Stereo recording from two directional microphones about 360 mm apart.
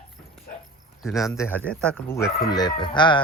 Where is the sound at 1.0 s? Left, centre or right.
Centre.